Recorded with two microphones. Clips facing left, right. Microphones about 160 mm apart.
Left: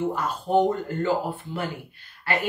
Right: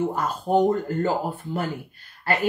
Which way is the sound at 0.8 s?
40° right (ahead or behind).